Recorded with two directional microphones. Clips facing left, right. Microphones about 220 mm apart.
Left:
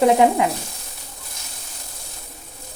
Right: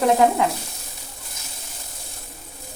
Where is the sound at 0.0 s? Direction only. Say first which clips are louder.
Left 2 dB; 20° left (ahead or behind).